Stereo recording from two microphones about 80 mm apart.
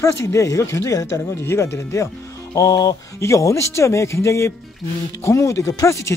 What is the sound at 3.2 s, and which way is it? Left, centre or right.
Speech, left.